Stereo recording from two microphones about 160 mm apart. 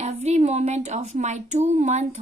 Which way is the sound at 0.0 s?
45° right (ahead or behind).